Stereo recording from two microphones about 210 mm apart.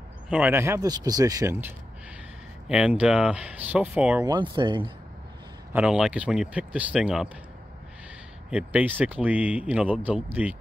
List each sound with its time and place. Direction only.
0.3 s speech: 10° right (ahead or behind)
2.7 s speech: 5° right (ahead or behind)
4.3 s speech: 20° right (ahead or behind)
5.7 s speech: 5° right (ahead or behind)
8.5 s speech: 5° right (ahead or behind)